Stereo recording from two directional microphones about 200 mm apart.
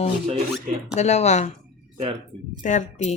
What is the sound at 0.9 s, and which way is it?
Speech, 35° left (ahead or behind).